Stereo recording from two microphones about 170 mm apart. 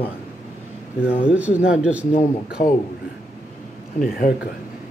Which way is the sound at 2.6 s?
45° left (ahead or behind).